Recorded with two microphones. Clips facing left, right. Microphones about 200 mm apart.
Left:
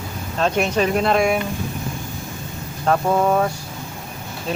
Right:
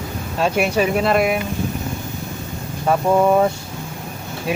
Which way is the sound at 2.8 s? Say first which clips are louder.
Right 2 dB; 10° right (ahead or behind).